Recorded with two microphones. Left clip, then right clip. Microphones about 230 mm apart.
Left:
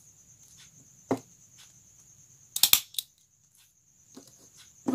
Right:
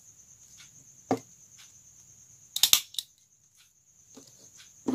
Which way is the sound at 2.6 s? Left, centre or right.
Centre.